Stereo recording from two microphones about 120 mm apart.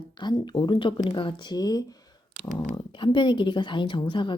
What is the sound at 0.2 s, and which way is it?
A woman's voice, 40° left (ahead or behind).